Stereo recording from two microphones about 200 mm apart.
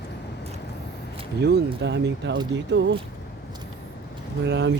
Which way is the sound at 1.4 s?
55° right (ahead or behind).